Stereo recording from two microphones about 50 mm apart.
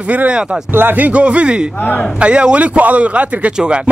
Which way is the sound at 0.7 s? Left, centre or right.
Right.